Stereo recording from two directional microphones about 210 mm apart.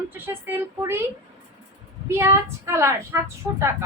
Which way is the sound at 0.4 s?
10° right (ahead or behind).